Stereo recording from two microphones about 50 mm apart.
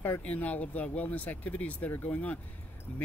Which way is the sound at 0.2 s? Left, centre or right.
Left.